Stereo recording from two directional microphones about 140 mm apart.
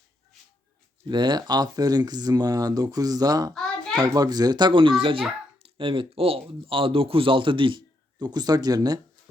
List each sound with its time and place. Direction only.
1.0 s speech: 30° right (ahead or behind)
3.5 s a sound: 5° left (ahead or behind)
3.9 s speech: 25° right (ahead or behind)